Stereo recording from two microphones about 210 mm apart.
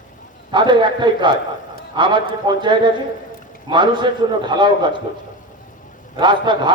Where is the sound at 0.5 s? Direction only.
20° right (ahead or behind).